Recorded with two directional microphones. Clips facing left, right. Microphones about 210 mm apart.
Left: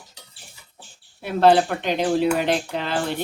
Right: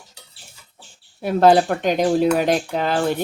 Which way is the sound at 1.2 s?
45° right (ahead or behind).